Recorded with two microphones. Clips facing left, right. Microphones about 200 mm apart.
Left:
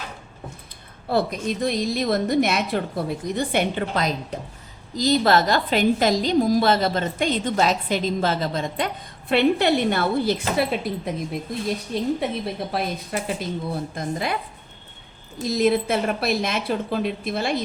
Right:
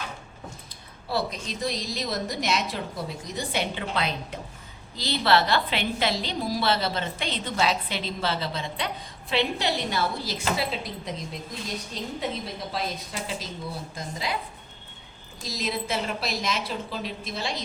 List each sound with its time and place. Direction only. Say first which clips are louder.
1.0 s a woman's voice: left 7 dB; 55° left (ahead or behind)
15.4 s a woman's voice: left 11 dB; 55° left (ahead or behind)